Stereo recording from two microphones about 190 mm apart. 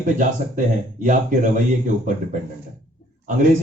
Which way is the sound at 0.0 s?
45° right (ahead or behind).